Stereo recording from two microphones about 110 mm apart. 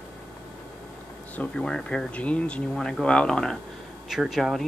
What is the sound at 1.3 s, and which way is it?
Speech, 10° left (ahead or behind).